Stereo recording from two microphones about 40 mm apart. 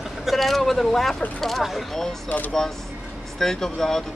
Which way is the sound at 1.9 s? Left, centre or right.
Centre.